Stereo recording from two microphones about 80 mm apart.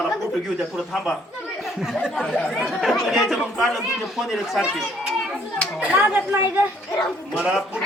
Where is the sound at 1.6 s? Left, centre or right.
Centre.